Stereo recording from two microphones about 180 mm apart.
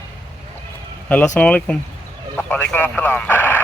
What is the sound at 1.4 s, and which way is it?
Speech, 5° left (ahead or behind).